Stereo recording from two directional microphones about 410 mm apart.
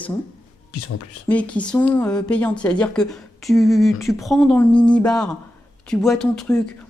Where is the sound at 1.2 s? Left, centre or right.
Centre.